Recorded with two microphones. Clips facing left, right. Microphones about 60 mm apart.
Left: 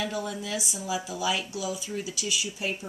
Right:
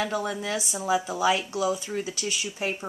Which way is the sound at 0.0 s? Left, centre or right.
Right.